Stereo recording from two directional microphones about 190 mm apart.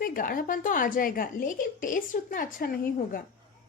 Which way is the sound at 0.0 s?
50° left (ahead or behind).